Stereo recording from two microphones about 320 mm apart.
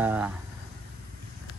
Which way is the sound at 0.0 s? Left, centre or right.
Centre.